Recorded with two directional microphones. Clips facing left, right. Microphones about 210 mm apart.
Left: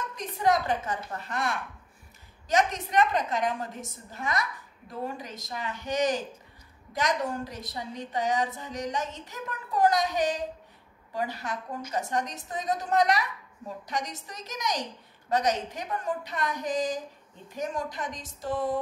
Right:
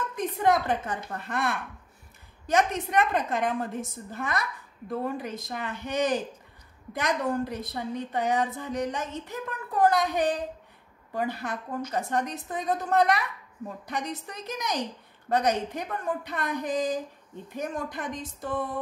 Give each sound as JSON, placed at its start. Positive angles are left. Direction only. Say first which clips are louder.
{"t": 0.1, "sound": "a woman's voice", "louder": "right 1 dB", "side_deg": -55}